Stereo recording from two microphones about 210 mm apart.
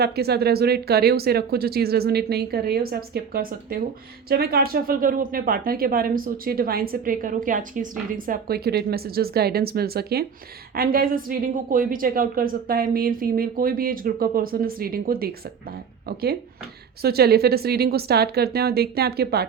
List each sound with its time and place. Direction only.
0.0 s a woman's voice: 50° right (ahead or behind)